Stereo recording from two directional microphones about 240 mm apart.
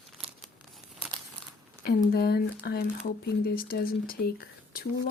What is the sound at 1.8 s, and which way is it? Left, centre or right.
Speech, left.